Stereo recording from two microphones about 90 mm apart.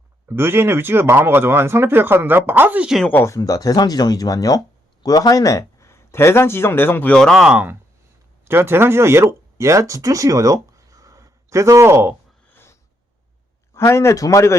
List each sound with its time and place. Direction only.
0.3 s speech: 25° right (ahead or behind)
3.1 s speech: 25° left (ahead or behind)
3.3 s speech: 40° left (ahead or behind); by 7.1 s 25° left (ahead or behind)
7.1 s speech: 5° left (ahead or behind)
7.4 s speech: 15° right (ahead or behind)
8.4 s speech: 25° right (ahead or behind)
12.5 s a sound: 25° left (ahead or behind)
13.7 s speech: 30° left (ahead or behind)